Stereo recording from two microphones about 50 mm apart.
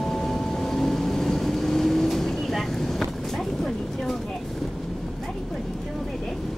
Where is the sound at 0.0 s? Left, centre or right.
Centre.